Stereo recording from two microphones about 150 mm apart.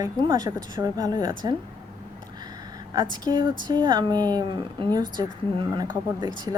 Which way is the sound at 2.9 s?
30° right (ahead or behind).